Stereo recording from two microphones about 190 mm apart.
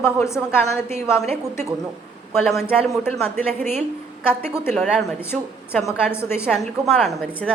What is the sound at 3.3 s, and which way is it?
Speech, 35° right (ahead or behind).